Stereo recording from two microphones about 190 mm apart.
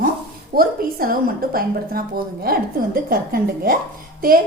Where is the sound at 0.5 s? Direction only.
50° right (ahead or behind).